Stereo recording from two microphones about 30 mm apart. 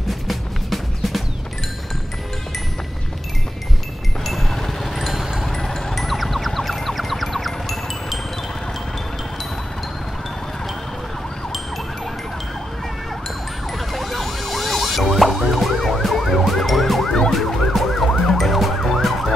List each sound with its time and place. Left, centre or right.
0.1 s music: centre
4.2 s a sound: centre
4.9 s vehicle: centre
5.9 s music: centre
13.7 s emergency vehicle: centre
18.1 s emergency vehicle: centre
18.4 s emergency vehicle: centre